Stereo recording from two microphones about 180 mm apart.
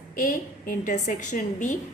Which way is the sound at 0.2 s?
50° left (ahead or behind).